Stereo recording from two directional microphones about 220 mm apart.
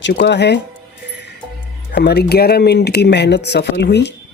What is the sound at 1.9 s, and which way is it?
Speech, 50° left (ahead or behind).